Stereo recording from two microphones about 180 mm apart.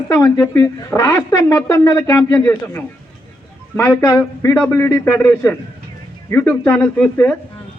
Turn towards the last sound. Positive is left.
turn(degrees=10)  # may be behind; listen again after turning